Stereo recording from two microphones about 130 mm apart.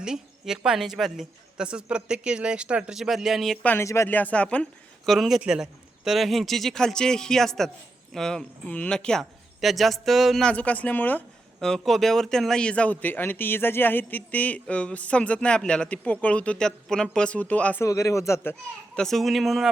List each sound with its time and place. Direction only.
0.0 s speech: 5° right (ahead or behind)
3.6 s speech: 15° left (ahead or behind)
5.1 s speech: centre (ahead or behind)
11.6 s speech: 5° left (ahead or behind)
17.8 s a man's voice: 25° left (ahead or behind)
18.9 s speech: 5° left (ahead or behind)